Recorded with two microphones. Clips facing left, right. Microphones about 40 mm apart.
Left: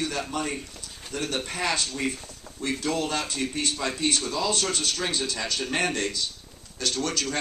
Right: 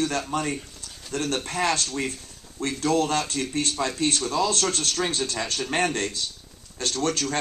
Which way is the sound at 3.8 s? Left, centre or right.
Centre.